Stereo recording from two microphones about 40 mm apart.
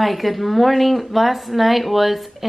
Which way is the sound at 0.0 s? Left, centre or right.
Centre.